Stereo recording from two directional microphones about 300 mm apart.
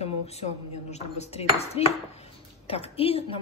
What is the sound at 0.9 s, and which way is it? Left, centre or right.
A woman's voice, left.